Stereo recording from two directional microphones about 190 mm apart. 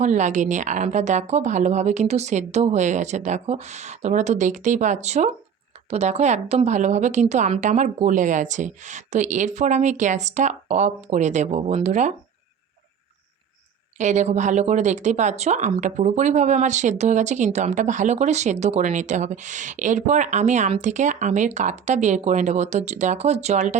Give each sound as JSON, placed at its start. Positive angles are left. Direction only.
{"t": 0.0, "sound": "speech", "side_deg": -40}
{"t": 14.0, "sound": "speech", "side_deg": -40}